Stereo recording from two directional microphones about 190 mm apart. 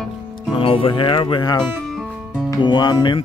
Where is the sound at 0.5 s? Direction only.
30° left (ahead or behind).